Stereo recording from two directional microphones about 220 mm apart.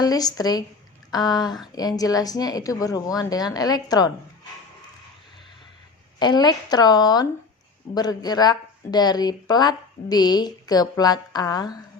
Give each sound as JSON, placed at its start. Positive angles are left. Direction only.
{"t": 0.0, "sound": "speech", "side_deg": 15}
{"t": 6.1, "sound": "speech", "side_deg": 20}